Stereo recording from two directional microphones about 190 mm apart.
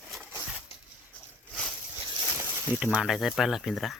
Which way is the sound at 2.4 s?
10° right (ahead or behind).